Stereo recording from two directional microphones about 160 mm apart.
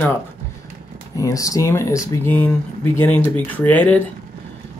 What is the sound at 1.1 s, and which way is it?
Speech, 20° left (ahead or behind).